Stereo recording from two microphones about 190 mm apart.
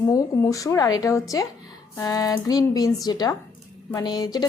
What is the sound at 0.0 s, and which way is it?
Speech, 20° left (ahead or behind).